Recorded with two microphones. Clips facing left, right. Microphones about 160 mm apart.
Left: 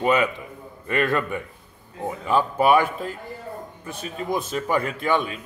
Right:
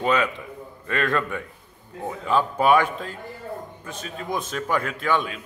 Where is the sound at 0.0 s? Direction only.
10° left (ahead or behind).